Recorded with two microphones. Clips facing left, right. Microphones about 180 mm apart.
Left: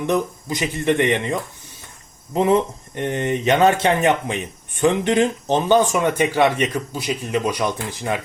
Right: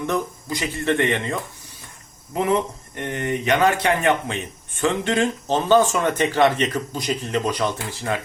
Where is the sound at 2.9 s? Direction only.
20° left (ahead or behind).